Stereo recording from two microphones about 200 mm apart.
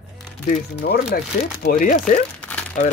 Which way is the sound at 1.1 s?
50° left (ahead or behind).